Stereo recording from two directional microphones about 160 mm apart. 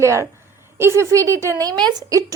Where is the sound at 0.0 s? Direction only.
20° right (ahead or behind).